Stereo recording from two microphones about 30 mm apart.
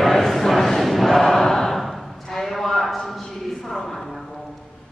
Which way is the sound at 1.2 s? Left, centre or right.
Centre.